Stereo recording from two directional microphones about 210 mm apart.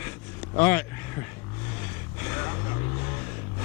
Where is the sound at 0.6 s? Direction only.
10° left (ahead or behind).